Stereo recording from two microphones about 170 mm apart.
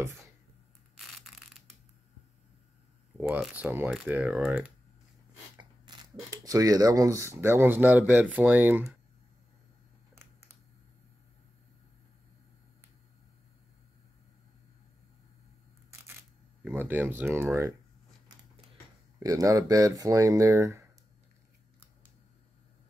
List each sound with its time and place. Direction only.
0.9 s a sound: centre (ahead or behind)
3.2 s a sound: 15° right (ahead or behind)
3.4 s speech: 10° right (ahead or behind)
5.6 s speech: 25° right (ahead or behind)
16.6 s speech: 10° right (ahead or behind)
19.1 s speech: 20° right (ahead or behind)